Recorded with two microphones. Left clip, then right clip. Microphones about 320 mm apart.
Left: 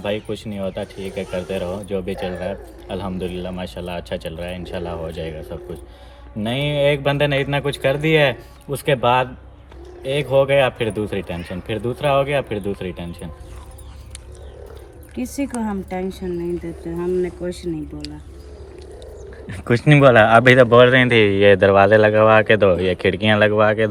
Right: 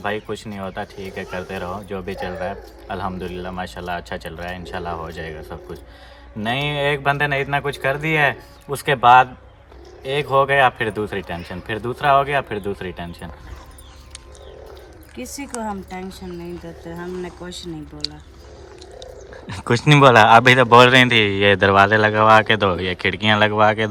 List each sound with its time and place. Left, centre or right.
0.0 s speech: centre
1.1 s speech: right
1.5 s speech: centre
15.1 s speech: centre
17.2 s speech: centre
19.5 s speech: centre